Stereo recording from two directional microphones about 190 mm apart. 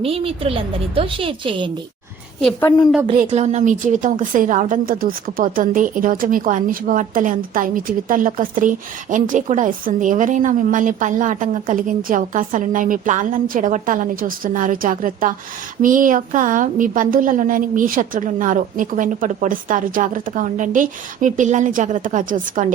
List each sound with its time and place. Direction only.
0.0 s a woman's voice: 30° right (ahead or behind)
2.4 s a woman's voice: 5° left (ahead or behind)
3.2 s a woman's voice: 35° right (ahead or behind)